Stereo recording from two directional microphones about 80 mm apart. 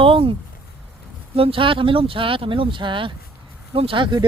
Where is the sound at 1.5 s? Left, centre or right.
Right.